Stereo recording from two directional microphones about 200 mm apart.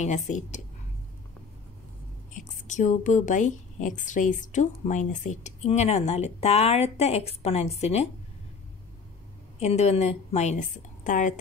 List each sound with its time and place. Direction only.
0.0 s a woman's voice: 35° left (ahead or behind)
2.3 s a woman's voice: 40° left (ahead or behind)
9.6 s a woman's voice: 30° left (ahead or behind)